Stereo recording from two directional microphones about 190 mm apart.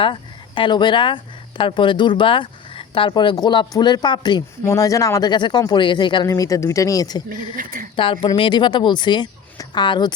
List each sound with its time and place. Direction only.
0.0 s speech: 25° left (ahead or behind)
7.5 s speech: 50° right (ahead or behind)
7.9 s speech: 25° left (ahead or behind)